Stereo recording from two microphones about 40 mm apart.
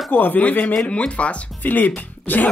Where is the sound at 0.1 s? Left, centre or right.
Left.